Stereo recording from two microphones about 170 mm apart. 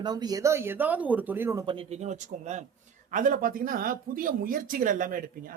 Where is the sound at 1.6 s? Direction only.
30° right (ahead or behind).